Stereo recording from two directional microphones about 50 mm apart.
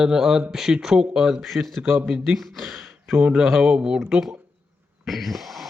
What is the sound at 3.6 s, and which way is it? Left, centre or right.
Speech, centre.